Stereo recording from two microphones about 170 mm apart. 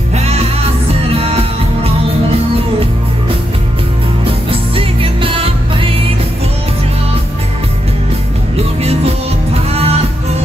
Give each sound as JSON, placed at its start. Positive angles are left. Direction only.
{"t": 0.1, "sound": "music", "side_deg": -35}
{"t": 4.2, "sound": "music", "side_deg": -35}
{"t": 9.5, "sound": "music", "side_deg": -35}